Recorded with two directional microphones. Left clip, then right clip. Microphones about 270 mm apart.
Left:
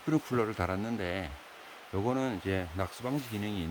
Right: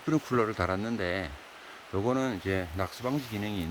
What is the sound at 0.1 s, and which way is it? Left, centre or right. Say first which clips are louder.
Speech: right 3 dB; centre.